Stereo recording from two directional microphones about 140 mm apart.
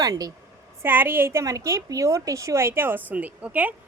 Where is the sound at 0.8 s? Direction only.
15° right (ahead or behind).